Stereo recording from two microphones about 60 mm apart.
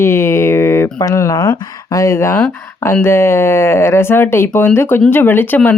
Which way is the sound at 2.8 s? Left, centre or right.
Left.